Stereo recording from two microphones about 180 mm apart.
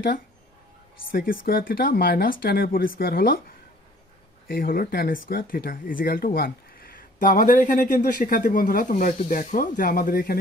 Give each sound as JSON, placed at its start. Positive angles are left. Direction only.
{"t": 1.1, "sound": "speech", "side_deg": 50}